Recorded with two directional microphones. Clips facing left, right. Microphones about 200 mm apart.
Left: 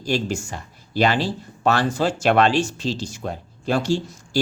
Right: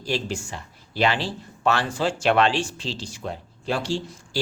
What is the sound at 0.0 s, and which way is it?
Speech, 45° left (ahead or behind).